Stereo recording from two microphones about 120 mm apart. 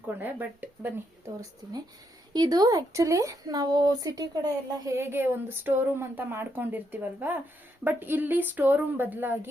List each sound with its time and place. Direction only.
0.2 s speech: 15° right (ahead or behind)
2.3 s a woman's voice: 35° right (ahead or behind); by 9.5 s 15° right (ahead or behind)